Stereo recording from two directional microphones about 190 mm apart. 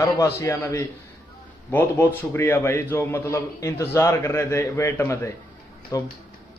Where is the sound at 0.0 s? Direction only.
15° left (ahead or behind).